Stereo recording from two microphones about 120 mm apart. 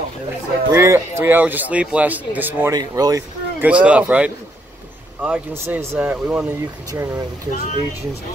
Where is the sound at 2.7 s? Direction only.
35° right (ahead or behind).